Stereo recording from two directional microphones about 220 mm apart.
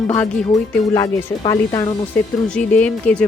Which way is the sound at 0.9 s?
15° left (ahead or behind).